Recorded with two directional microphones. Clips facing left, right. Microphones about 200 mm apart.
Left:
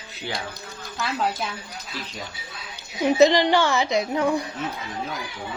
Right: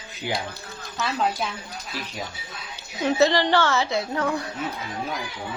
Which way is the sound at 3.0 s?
15° left (ahead or behind).